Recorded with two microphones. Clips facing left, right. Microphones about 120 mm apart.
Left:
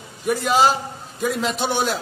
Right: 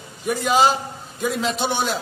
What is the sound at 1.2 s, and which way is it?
Speech, 5° left (ahead or behind).